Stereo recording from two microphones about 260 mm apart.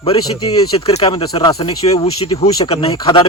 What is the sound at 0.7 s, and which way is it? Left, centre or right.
Speech, left.